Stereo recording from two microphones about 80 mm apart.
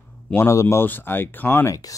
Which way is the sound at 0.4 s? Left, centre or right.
Left.